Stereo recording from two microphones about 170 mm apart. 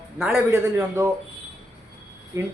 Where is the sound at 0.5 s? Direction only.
15° right (ahead or behind).